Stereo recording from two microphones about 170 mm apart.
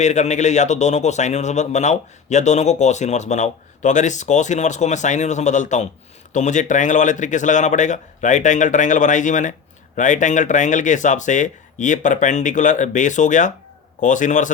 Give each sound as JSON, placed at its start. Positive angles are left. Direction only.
{"t": 0.0, "sound": "speech", "side_deg": 45}